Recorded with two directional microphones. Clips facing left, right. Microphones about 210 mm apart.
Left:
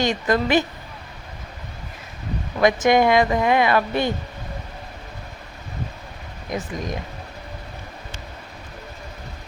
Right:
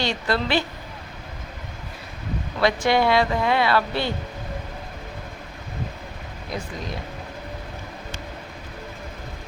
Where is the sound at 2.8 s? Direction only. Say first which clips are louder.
Left 3 dB; 15° left (ahead or behind).